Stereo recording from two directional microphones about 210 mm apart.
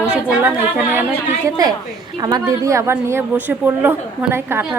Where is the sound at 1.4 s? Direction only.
20° right (ahead or behind).